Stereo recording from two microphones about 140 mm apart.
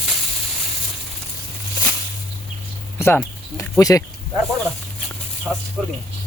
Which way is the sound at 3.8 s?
25° left (ahead or behind).